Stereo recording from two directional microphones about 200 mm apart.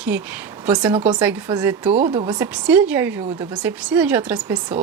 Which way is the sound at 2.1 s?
25° right (ahead or behind).